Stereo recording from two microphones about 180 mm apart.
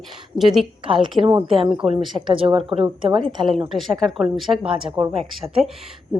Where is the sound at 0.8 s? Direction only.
30° right (ahead or behind).